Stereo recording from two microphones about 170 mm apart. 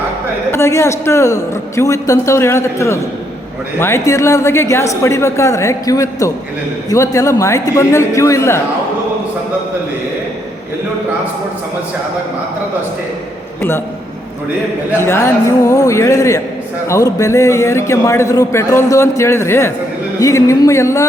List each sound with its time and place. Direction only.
0.5 s a man's voice: 15° left (ahead or behind)
13.6 s a man's voice: 15° left (ahead or behind)
15.0 s a man's voice: 15° left (ahead or behind)